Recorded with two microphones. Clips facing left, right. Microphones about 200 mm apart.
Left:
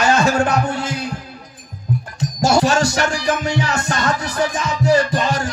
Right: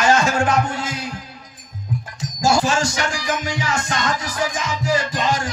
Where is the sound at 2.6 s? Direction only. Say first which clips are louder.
Left 4 dB; 60° left (ahead or behind).